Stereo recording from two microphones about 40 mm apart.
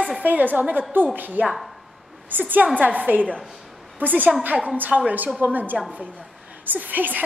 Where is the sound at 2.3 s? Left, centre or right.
Right.